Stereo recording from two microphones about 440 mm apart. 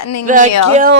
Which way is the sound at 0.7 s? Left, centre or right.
Centre.